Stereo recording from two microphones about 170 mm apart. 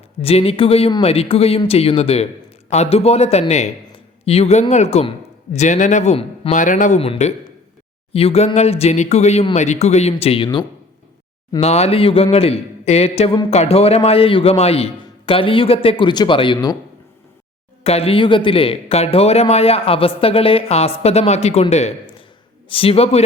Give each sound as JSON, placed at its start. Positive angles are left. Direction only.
{"t": 0.2, "sound": "a man's voice", "side_deg": 35}
{"t": 6.6, "sound": "a man's voice", "side_deg": 50}
{"t": 17.8, "sound": "a man's voice", "side_deg": 35}